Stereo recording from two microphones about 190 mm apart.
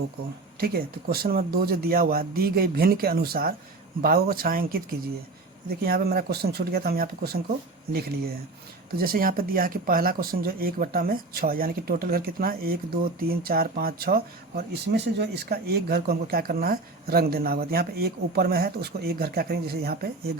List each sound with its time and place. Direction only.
0.6 s speech: 55° right (ahead or behind)